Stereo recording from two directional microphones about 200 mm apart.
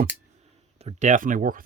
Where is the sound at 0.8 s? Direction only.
35° right (ahead or behind).